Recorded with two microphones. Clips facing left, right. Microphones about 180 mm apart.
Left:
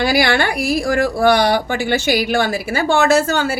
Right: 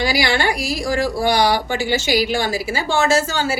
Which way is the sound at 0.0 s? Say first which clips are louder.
Left 3 dB; 60° left (ahead or behind).